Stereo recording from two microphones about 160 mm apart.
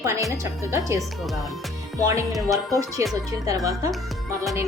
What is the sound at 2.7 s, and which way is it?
A woman's voice, 20° right (ahead or behind).